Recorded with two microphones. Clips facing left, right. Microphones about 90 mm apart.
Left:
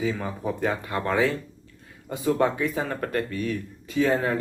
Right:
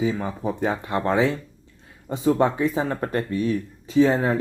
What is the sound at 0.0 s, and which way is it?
Speech, 25° right (ahead or behind).